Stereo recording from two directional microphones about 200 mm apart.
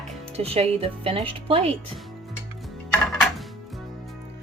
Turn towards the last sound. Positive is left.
turn(degrees=0)  # may be behind; listen again after turning